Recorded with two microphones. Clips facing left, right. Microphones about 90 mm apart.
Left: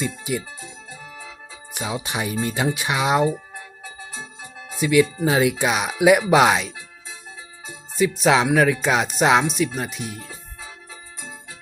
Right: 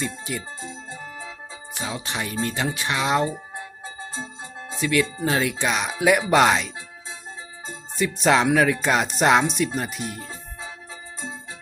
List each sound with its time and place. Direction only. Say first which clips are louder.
0.0 s speech: left 3 dB; 10° left (ahead or behind)
0.6 s music: right 3 dB; 30° right (ahead or behind)
1.7 s speech: left 3 dB; 15° left (ahead or behind)
4.8 s speech: left 5 dB; 10° left (ahead or behind)
7.9 s speech: left 2 dB; 5° left (ahead or behind)